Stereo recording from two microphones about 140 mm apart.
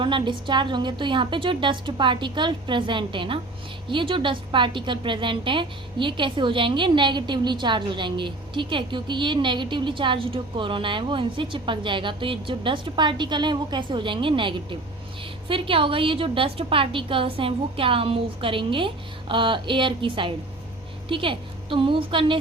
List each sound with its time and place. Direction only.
0.0 s a woman's voice: 35° right (ahead or behind)